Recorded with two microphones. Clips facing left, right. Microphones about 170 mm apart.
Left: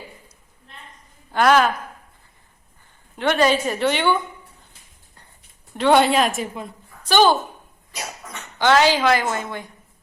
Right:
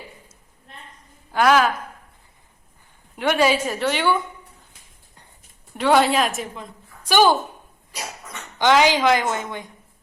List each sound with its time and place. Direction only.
1.3 s a woman's voice: 5° right (ahead or behind)
3.2 s a woman's voice: 10° right (ahead or behind)
5.7 s a woman's voice: 5° right (ahead or behind)
7.1 s a woman's voice: 10° right (ahead or behind)
8.5 s a woman's voice: 15° right (ahead or behind)